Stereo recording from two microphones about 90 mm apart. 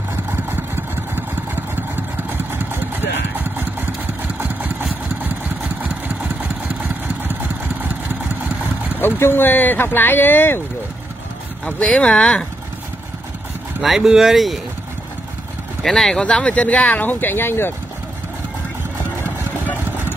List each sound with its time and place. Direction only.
0.3 s vehicle: 25° right (ahead or behind)
4.4 s engine: 20° right (ahead or behind)
6.8 s vehicle: 20° right (ahead or behind)
9.0 s speech: 25° left (ahead or behind)
11.6 s speech: 10° left (ahead or behind)
13.8 s speech: 5° right (ahead or behind)
15.8 s speech: 5° left (ahead or behind); by 17.7 s 25° left (ahead or behind)
19.2 s engine: 25° left (ahead or behind)